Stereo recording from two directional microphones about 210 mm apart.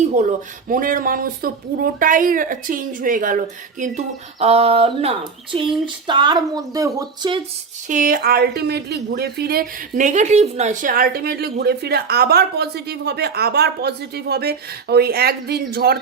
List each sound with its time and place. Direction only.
0.0 s speech: 35° right (ahead or behind); by 7.3 s 20° right (ahead or behind)
7.9 s a woman's voice: 40° right (ahead or behind)